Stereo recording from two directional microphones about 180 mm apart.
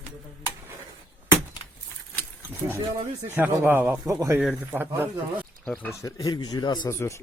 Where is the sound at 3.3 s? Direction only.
10° right (ahead or behind).